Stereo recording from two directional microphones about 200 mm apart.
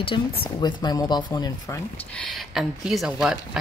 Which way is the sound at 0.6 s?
20° left (ahead or behind).